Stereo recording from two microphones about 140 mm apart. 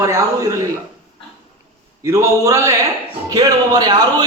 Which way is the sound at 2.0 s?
20° right (ahead or behind).